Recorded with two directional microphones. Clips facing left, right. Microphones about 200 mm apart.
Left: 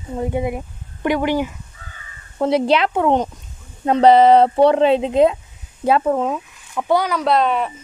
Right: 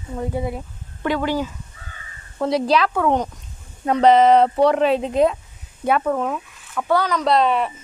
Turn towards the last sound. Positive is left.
turn(degrees=0)  # may be behind; listen again after turning